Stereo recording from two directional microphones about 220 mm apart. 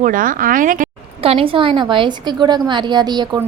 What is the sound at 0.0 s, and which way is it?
A woman's voice, 40° right (ahead or behind).